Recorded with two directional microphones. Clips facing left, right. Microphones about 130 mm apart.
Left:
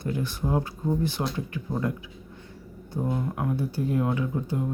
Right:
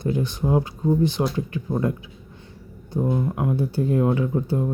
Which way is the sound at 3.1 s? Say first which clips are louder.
Right 5 dB; 20° right (ahead or behind).